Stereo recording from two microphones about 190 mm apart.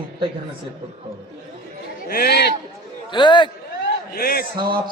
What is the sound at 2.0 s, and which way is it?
Speech, 55° left (ahead or behind).